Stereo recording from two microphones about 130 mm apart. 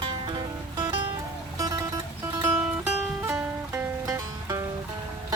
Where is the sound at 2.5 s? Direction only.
15° right (ahead or behind).